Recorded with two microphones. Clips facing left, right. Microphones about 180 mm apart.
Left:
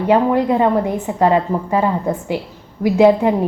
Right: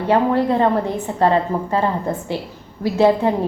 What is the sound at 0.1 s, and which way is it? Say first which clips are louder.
A woman's voice: left 2 dB; 15° left (ahead or behind).